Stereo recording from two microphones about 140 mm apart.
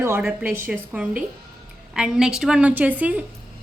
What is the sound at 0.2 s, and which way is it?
Speech, 10° right (ahead or behind).